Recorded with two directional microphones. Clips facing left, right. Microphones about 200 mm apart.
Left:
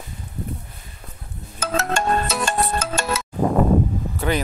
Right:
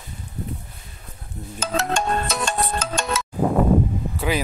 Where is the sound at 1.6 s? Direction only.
5° left (ahead or behind).